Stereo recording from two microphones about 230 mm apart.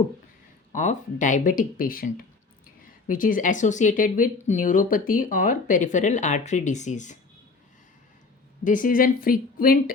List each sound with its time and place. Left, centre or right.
0.7 s speech: left
8.6 s speech: left